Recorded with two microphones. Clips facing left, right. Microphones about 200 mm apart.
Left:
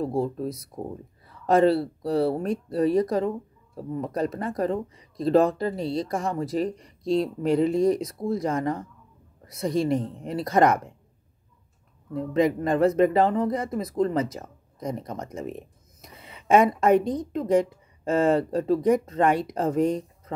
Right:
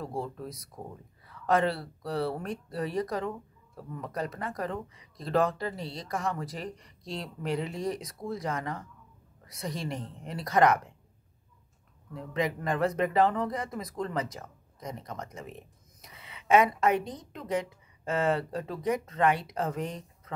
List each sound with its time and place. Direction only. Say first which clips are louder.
1.2 s speech: left 7 dB; 35° left (ahead or behind)
8.2 s speech: left 5 dB; 30° left (ahead or behind)
12.1 s speech: left 9 dB; 35° left (ahead or behind)
16.0 s a woman's voice: left 5 dB; 40° left (ahead or behind)